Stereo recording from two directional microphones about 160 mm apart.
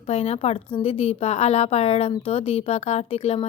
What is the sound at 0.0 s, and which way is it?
Speech, 40° left (ahead or behind).